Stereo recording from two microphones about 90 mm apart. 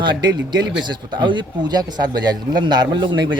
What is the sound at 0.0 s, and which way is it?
A man's voice, 55° right (ahead or behind).